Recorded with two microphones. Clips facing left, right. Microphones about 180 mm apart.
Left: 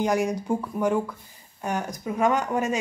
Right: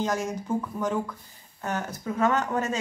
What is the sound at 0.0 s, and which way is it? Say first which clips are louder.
A woman's voice: left 4 dB; 15° left (ahead or behind).